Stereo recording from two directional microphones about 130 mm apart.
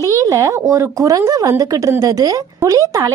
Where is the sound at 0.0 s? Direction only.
25° right (ahead or behind).